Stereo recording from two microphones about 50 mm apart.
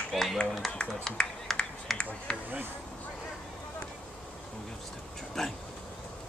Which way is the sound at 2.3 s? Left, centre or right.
Centre.